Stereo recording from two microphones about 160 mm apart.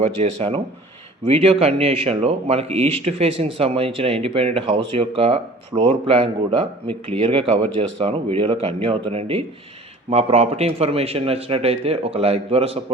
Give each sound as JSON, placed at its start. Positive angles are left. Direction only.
{"t": 0.0, "sound": "a man's voice", "side_deg": -45}